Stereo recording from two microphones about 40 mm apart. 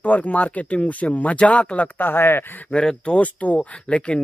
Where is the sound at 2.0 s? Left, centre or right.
Left.